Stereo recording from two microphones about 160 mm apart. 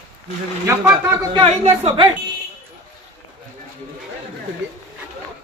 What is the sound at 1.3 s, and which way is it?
Speech, 35° right (ahead or behind).